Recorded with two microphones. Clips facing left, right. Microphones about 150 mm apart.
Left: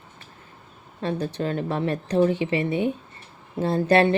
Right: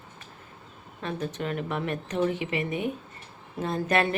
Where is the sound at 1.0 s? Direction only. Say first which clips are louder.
Left 5 dB; 35° left (ahead or behind).